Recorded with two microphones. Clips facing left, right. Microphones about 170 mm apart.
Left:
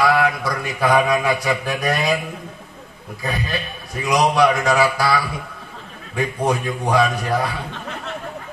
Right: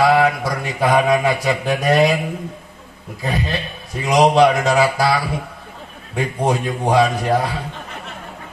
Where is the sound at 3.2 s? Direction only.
20° right (ahead or behind).